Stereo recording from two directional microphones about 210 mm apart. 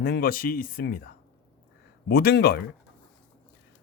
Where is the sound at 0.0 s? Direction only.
45° left (ahead or behind).